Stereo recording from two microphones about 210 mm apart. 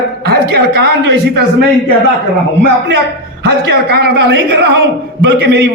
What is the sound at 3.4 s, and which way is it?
A man's voice, 55° right (ahead or behind).